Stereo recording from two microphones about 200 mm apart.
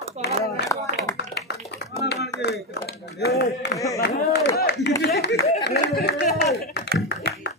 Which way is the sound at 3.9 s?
55° left (ahead or behind).